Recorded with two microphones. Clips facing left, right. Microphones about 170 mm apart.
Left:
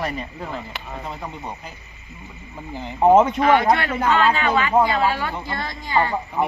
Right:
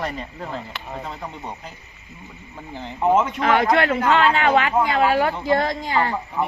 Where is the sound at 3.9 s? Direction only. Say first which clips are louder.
Right 1 dB; 65° right (ahead or behind).